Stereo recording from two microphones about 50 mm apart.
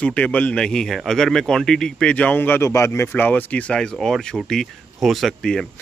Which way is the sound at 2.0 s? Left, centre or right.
Left.